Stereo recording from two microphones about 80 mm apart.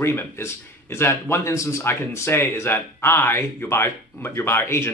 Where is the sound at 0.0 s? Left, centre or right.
Left.